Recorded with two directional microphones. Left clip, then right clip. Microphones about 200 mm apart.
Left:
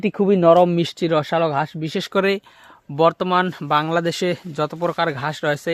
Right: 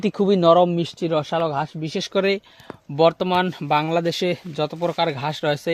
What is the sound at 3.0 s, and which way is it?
Speech, centre (ahead or behind).